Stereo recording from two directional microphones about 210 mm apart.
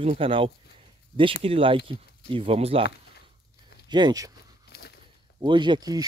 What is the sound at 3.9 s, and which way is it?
Speech, 20° right (ahead or behind).